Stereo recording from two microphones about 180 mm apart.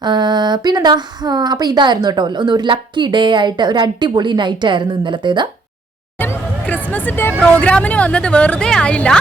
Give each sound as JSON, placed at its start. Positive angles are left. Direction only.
{"t": 0.0, "sound": "speech", "side_deg": -25}
{"t": 6.1, "sound": "music", "side_deg": 10}
{"t": 6.8, "sound": "a woman's voice", "side_deg": 10}